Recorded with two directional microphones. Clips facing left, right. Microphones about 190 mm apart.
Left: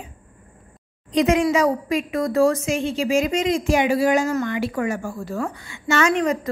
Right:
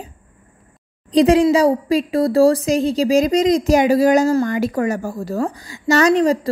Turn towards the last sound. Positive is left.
turn(degrees=-35)  # may be behind; listen again after turning